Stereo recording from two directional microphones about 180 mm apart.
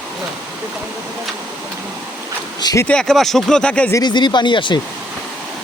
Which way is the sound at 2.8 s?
5° left (ahead or behind).